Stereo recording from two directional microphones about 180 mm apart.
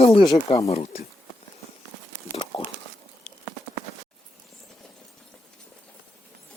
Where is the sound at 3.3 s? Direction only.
40° left (ahead or behind).